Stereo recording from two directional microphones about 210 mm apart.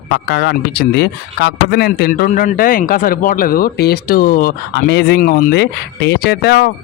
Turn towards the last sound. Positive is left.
turn(degrees=50)  # may be behind; listen again after turning